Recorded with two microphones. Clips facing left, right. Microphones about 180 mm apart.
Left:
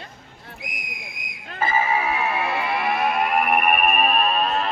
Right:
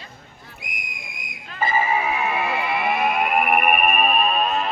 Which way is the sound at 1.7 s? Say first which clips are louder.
Even; 5° right (ahead or behind).